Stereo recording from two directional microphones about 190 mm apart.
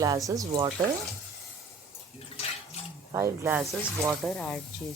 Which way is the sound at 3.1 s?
15° right (ahead or behind).